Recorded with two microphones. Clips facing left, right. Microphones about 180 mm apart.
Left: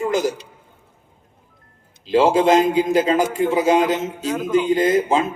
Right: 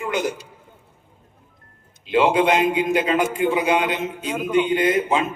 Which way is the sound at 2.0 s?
35° left (ahead or behind).